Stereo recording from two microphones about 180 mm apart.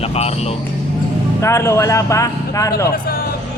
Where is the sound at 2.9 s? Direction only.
55° left (ahead or behind).